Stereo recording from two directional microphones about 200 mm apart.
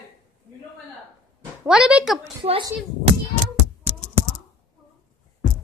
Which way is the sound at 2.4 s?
25° right (ahead or behind).